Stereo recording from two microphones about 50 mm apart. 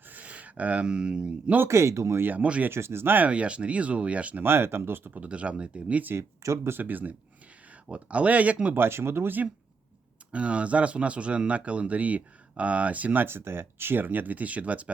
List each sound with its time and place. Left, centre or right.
0.1 s speech: right
1.7 s speech: right
2.2 s speech: right
2.6 s speech: right
3.2 s speech: right
4.4 s speech: right
5.2 s speech: right
6.1 s speech: right
6.7 s speech: right
7.9 s speech: right
8.7 s speech: right
10.3 s speech: right
13.2 s speech: right